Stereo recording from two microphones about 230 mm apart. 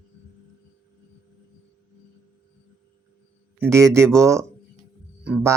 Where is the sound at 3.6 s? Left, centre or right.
Centre.